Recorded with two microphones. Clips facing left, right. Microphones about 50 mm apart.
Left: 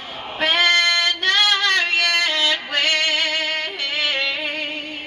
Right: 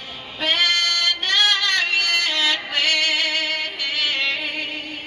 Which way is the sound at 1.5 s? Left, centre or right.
Left.